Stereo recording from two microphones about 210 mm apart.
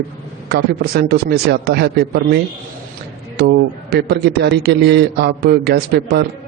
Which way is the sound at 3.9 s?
50° right (ahead or behind).